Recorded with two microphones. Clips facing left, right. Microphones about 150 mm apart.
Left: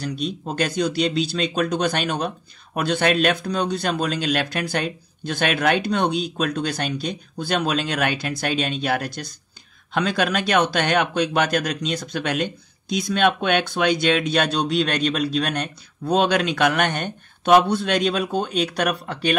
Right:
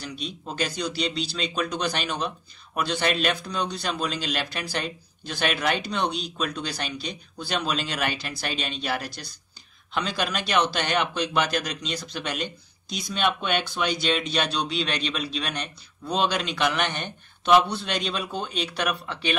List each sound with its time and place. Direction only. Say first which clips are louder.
0.0 s speech: left 8 dB; 45° left (ahead or behind)